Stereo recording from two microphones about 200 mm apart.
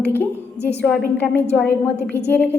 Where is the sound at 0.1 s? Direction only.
10° left (ahead or behind).